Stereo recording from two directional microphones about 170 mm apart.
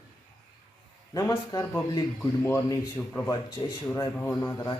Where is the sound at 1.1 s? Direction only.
20° left (ahead or behind).